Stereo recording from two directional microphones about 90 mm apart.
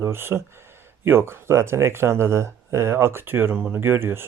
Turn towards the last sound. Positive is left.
turn(degrees=-25)  # may be behind; listen again after turning